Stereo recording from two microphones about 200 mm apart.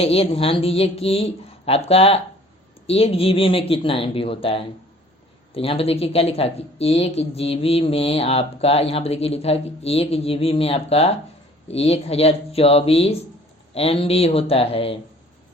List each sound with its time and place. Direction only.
0.0 s a woman's voice: 30° left (ahead or behind)